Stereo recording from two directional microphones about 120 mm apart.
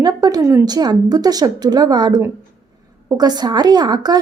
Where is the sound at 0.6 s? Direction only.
35° right (ahead or behind).